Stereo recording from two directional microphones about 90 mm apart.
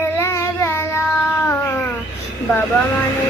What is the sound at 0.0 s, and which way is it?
Child singing, 30° left (ahead or behind).